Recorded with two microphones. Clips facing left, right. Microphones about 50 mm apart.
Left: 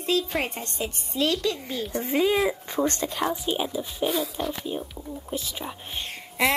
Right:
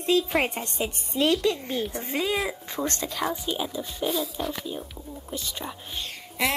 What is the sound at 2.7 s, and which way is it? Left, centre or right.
Speech, left.